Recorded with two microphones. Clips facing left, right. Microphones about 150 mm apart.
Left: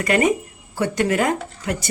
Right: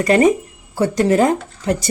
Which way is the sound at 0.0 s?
35° right (ahead or behind).